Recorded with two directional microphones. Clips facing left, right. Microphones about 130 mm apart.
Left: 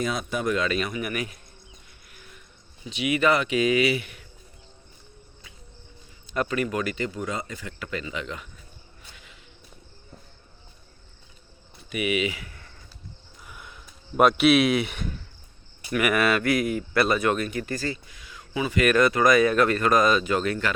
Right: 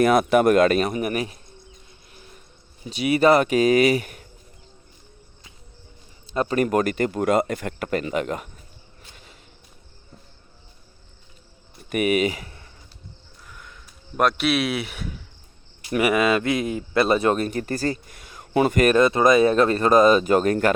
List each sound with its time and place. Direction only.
0.0 s speech: 65° right (ahead or behind); by 1.4 s 35° right (ahead or behind)
2.1 s a sound: 30° right (ahead or behind)
2.8 s speech: 40° right (ahead or behind)
6.3 s a man's voice: 30° right (ahead or behind)
6.6 s speech: 45° right (ahead or behind)
11.9 s speech: 45° right (ahead or behind)
13.5 s a sound: 10° left (ahead or behind)
14.3 s speech: centre (ahead or behind)
15.9 s speech: 25° right (ahead or behind); by 18.6 s 45° right (ahead or behind)
18.9 s speech: 25° right (ahead or behind); by 20.7 s 45° right (ahead or behind)